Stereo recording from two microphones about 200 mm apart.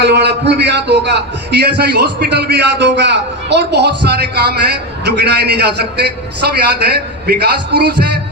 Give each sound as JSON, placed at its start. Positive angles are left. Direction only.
{"t": 0.0, "sound": "a man's voice", "side_deg": -55}